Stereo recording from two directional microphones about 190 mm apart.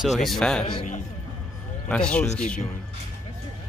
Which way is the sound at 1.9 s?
5° left (ahead or behind).